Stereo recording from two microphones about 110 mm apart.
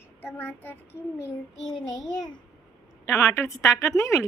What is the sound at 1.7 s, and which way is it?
Speech, 35° left (ahead or behind).